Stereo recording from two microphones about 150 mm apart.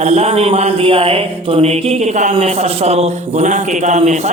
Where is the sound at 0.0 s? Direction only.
45° right (ahead or behind).